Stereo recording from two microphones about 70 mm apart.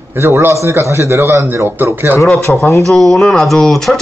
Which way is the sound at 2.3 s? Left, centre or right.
Centre.